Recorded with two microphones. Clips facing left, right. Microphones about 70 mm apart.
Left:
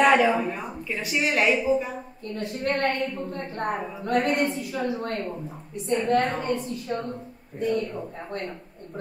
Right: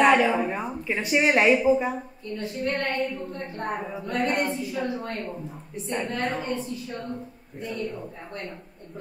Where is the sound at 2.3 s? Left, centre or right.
Left.